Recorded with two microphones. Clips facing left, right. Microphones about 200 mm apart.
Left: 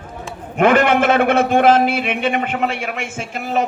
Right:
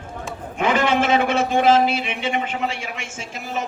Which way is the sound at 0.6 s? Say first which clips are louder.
Left 6 dB; 60° left (ahead or behind).